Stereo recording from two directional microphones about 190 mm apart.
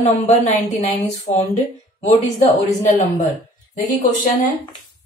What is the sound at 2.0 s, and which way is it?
A woman's voice, 40° left (ahead or behind).